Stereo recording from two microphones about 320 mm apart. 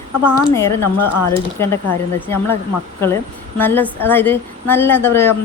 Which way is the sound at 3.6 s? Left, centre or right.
Centre.